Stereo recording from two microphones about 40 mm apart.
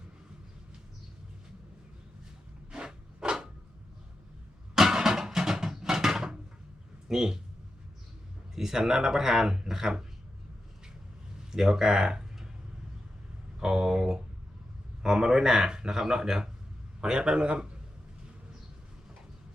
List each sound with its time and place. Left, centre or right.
2.7 s a sound: right
4.7 s a sound: centre
7.1 s speech: centre
8.5 s speech: centre
11.5 s speech: centre
13.6 s speech: centre